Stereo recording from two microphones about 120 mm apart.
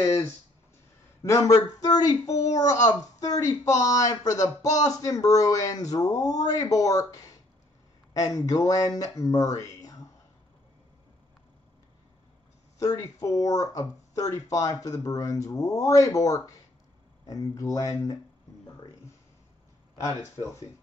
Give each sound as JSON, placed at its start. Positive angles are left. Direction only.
{"t": 1.2, "sound": "speech", "side_deg": 30}
{"t": 12.7, "sound": "speech", "side_deg": 30}
{"t": 20.0, "sound": "speech", "side_deg": 25}